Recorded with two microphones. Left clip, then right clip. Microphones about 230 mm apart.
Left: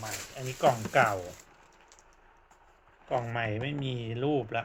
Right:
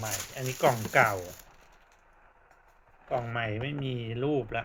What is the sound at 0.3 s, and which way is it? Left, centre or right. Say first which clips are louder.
Speech: even; centre.